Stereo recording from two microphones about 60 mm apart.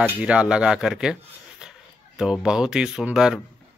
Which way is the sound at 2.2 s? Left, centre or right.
Centre.